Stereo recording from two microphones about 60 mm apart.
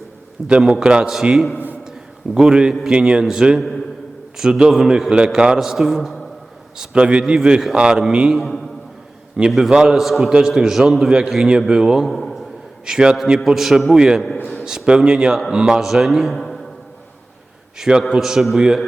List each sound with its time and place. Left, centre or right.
0.4 s a man's voice: centre
6.7 s a man's voice: centre
8.3 s a man's voice: centre
12.0 s a man's voice: centre
12.8 s a man's voice: centre
17.7 s a man's voice: centre